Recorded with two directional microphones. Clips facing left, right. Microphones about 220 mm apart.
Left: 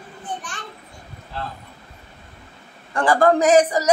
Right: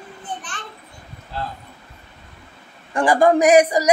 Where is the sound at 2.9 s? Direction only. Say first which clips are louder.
Right 1 dB; 15° right (ahead or behind).